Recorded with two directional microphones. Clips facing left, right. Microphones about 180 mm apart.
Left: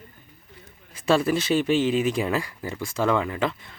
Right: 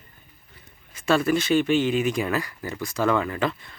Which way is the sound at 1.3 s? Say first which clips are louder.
Right 1 dB; 30° left (ahead or behind).